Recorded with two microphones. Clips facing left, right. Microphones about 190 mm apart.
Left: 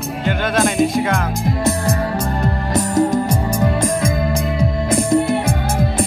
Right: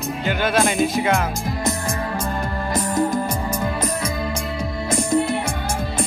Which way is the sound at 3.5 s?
40° left (ahead or behind).